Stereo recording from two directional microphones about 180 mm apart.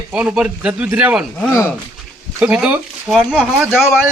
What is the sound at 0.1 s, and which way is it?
Speech, 5° right (ahead or behind).